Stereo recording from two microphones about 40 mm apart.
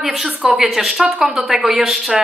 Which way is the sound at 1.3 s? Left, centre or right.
Centre.